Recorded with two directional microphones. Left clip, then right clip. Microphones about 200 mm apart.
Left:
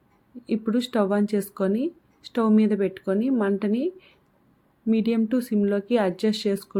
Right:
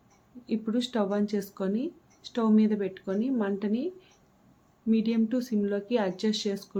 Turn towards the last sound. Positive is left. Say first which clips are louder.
# left 5 dB
turn(degrees=35)  # may be behind; listen again after turning